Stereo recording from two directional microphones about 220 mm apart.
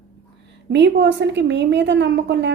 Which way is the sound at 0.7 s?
50° right (ahead or behind).